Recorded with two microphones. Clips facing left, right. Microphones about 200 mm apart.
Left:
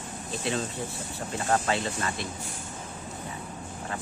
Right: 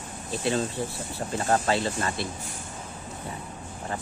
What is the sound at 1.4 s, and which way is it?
Speech, 35° right (ahead or behind).